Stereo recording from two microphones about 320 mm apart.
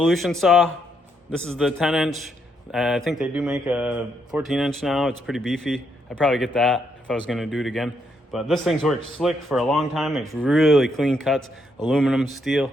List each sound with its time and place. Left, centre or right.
0.0 s speech: centre